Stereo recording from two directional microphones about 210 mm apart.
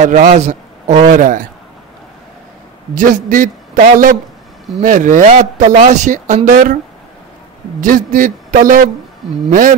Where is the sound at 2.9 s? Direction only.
40° right (ahead or behind).